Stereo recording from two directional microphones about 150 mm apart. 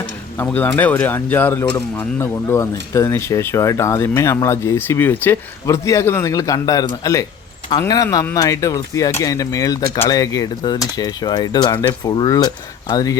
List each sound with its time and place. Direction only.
0.4 s speech: 10° left (ahead or behind)